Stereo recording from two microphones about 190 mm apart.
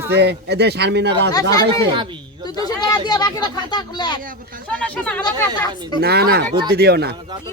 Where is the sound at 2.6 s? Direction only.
20° left (ahead or behind).